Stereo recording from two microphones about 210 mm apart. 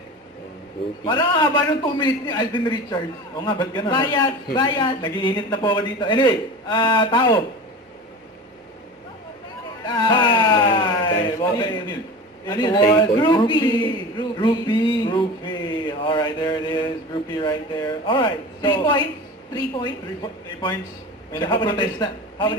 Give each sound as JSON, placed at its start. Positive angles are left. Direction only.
{"t": 1.0, "sound": "a man's voice", "side_deg": 20}
{"t": 9.8, "sound": "a sound", "side_deg": 20}
{"t": 12.5, "sound": "a man's voice", "side_deg": 20}